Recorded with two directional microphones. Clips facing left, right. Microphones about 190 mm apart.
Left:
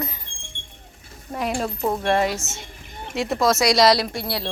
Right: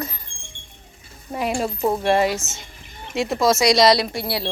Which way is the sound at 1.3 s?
5° right (ahead or behind).